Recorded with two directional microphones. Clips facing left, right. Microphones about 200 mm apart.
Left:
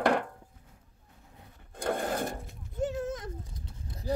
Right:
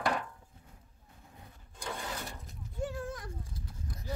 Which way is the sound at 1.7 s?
55° left (ahead or behind).